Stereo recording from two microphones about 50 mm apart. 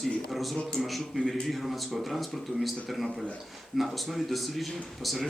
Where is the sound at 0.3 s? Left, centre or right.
Centre.